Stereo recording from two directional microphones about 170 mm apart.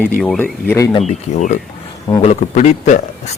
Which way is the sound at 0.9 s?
45° left (ahead or behind).